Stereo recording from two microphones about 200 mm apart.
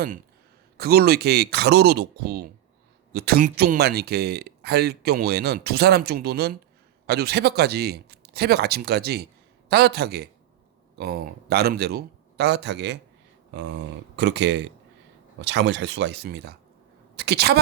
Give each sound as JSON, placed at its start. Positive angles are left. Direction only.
{"t": 0.8, "sound": "speech", "side_deg": -50}